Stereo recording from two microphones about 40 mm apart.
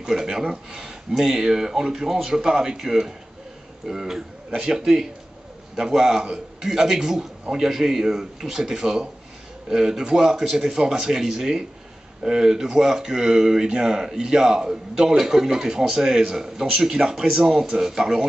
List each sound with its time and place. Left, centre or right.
0.0 s speech: centre